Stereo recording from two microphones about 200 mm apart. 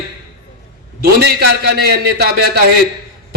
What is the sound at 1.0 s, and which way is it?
A man's voice, 50° right (ahead or behind).